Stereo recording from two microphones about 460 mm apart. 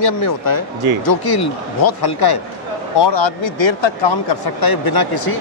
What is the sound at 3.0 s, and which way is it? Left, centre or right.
Speech, left.